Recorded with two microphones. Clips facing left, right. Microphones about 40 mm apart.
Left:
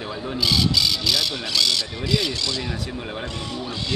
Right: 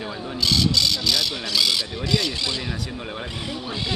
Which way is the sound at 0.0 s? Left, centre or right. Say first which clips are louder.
Left 1 dB; centre.